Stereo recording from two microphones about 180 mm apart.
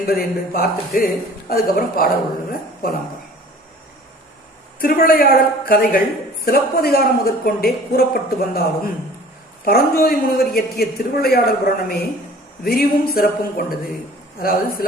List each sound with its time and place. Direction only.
0.0 s speech: 60° left (ahead or behind)
4.8 s speech: 55° left (ahead or behind)